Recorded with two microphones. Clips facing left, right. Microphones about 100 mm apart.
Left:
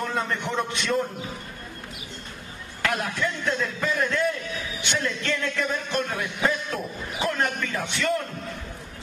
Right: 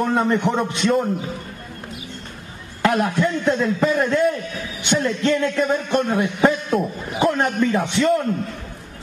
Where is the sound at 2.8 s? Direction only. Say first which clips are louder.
Right 8 dB; 35° right (ahead or behind).